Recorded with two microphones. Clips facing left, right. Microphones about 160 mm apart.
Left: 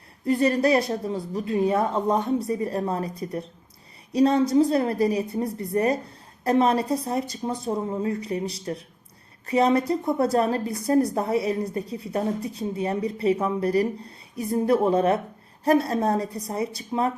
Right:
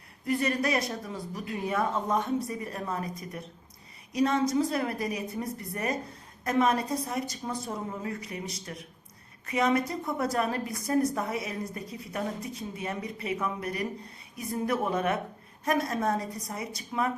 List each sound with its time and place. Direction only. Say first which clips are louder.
0.3 s a woman's voice: left 8 dB; 30° left (ahead or behind)